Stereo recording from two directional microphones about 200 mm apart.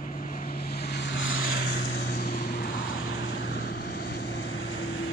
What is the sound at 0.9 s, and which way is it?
Vehicle, 70° left (ahead or behind).